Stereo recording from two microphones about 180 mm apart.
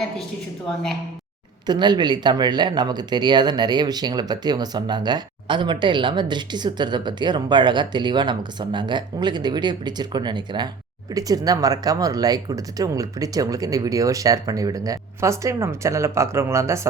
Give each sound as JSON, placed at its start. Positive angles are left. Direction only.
{"t": 1.6, "sound": "speech", "side_deg": -25}